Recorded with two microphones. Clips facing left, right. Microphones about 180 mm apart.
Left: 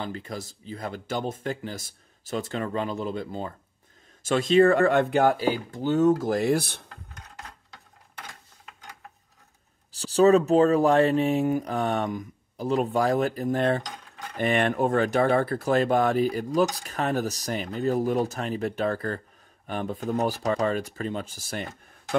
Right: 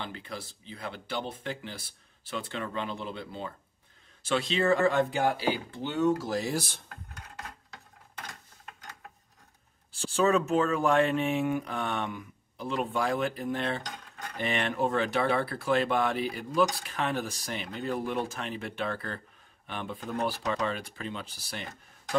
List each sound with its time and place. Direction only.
0.0 s speech: 40° left (ahead or behind); by 6.8 s 60° left (ahead or behind)
9.9 s speech: 35° left (ahead or behind)